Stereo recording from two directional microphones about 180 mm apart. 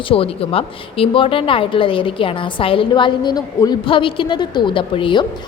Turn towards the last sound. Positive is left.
turn(degrees=25)  # may be behind; listen again after turning